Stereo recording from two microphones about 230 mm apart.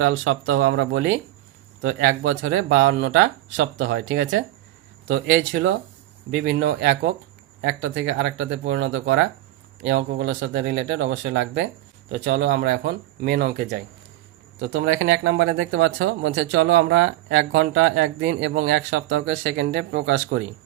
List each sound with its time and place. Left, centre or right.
0.0 s speech: right
0.6 s speech: right
6.3 s speech: right
14.6 s speech: right